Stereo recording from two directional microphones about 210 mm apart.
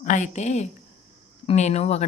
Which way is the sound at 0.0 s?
35° left (ahead or behind).